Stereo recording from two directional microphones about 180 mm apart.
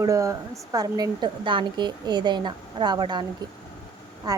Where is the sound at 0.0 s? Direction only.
20° right (ahead or behind).